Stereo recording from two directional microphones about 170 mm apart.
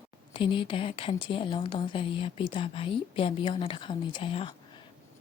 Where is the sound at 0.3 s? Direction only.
30° left (ahead or behind).